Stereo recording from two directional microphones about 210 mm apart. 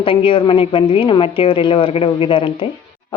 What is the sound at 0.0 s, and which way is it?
Speech, 25° left (ahead or behind).